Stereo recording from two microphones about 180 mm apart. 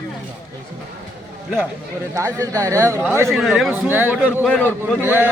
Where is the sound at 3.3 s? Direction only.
Centre (ahead or behind).